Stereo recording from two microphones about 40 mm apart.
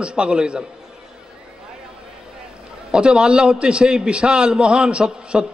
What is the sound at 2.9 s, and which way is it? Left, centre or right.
A man's voice, right.